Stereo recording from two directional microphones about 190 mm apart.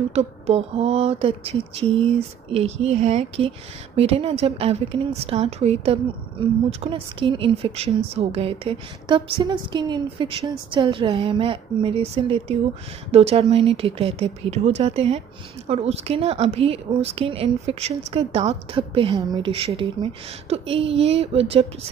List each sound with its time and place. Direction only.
0.1 s speech: 35° right (ahead or behind)